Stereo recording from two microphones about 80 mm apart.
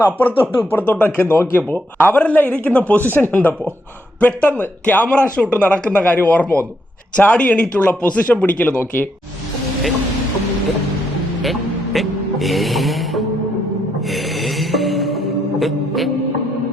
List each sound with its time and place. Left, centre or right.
0.2 s a man's voice: left
11.9 s music: centre